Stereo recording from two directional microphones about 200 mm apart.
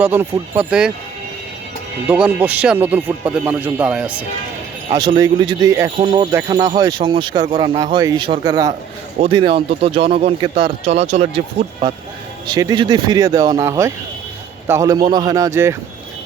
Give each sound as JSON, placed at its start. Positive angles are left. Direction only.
{"t": 0.0, "sound": "speech", "side_deg": -5}
{"t": 2.0, "sound": "speech", "side_deg": -5}
{"t": 4.9, "sound": "speech", "side_deg": -20}